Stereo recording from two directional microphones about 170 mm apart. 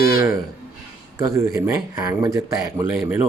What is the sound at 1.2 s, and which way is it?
Speech, 20° right (ahead or behind).